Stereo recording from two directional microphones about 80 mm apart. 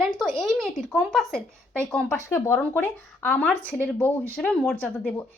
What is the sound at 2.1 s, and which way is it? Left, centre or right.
A woman's voice, left.